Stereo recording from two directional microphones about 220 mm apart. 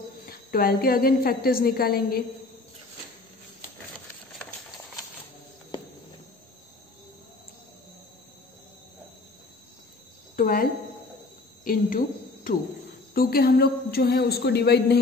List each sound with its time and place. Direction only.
0.3 s a woman's voice: 40° left (ahead or behind)
10.3 s a sound: 40° left (ahead or behind)
11.6 s a woman's voice: 40° left (ahead or behind)
13.1 s a woman's voice: 45° left (ahead or behind)